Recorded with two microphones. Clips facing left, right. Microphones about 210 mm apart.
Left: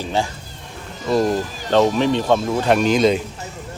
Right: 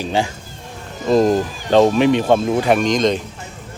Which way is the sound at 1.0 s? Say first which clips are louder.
Right 4 dB; 20° right (ahead or behind).